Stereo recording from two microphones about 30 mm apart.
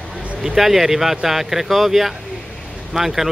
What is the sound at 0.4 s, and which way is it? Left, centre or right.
Speech, centre.